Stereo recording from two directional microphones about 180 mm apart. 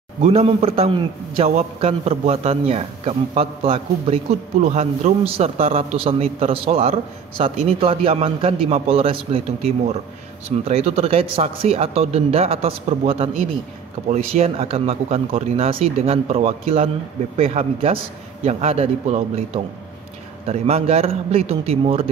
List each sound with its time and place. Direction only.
0.3 s a man's voice: 35° right (ahead or behind)